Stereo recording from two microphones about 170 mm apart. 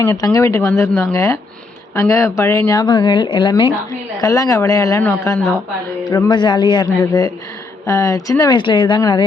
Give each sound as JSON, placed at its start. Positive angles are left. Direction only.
{"t": 0.2, "sound": "speech", "side_deg": 20}
{"t": 6.1, "sound": "speech", "side_deg": 25}